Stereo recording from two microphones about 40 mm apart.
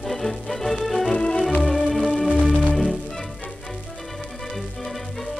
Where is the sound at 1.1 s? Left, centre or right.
Left.